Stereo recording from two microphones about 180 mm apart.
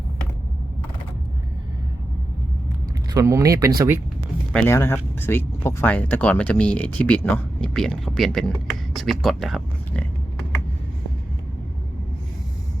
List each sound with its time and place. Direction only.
3.1 s speech: 15° right (ahead or behind)
4.5 s speech: 15° left (ahead or behind)